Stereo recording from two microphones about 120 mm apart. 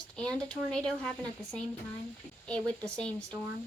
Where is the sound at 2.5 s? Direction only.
5° left (ahead or behind).